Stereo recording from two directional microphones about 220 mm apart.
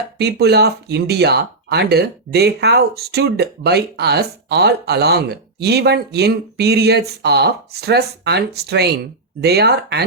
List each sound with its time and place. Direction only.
0.2 s speech: 50° right (ahead or behind)